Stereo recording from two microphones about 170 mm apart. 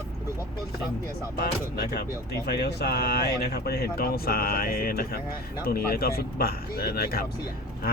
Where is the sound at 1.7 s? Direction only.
70° left (ahead or behind).